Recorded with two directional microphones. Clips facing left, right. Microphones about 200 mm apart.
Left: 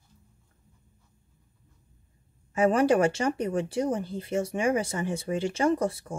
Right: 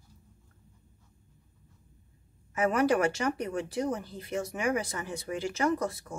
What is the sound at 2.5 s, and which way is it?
A woman's voice, 30° left (ahead or behind).